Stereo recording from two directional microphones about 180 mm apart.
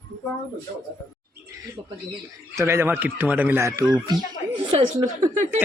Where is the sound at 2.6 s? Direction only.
15° right (ahead or behind).